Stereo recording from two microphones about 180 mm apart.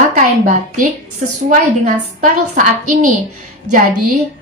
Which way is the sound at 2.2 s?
45° right (ahead or behind).